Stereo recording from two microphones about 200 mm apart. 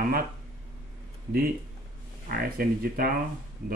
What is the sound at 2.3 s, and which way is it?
Speech, 50° right (ahead or behind).